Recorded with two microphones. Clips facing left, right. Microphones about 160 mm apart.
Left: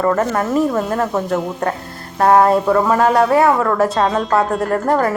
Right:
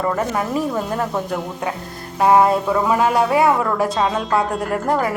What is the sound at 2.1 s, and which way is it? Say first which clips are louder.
Speech: left 2 dB; 5° right (ahead or behind).